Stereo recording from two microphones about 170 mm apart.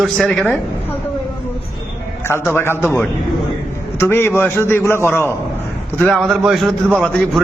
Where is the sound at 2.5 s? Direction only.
15° left (ahead or behind).